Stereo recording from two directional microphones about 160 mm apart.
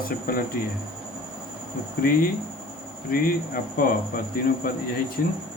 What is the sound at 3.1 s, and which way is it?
Speech, 65° left (ahead or behind).